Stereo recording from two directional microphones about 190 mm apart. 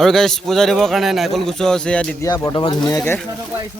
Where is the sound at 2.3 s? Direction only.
20° left (ahead or behind).